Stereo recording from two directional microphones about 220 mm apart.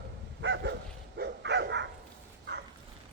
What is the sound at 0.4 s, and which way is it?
Bow-wow, 55° right (ahead or behind).